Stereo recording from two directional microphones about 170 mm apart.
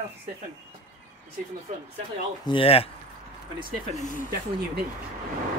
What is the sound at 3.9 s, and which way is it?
Speech, 50° left (ahead or behind).